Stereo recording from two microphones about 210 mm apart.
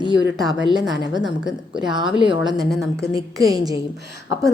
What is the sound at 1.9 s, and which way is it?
Speech, 20° right (ahead or behind).